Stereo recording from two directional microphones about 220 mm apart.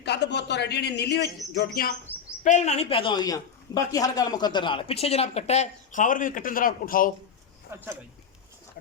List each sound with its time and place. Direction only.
0.0 s a man's voice: 50° left (ahead or behind)
2.4 s speech: 35° left (ahead or behind)
7.7 s speech: 10° right (ahead or behind)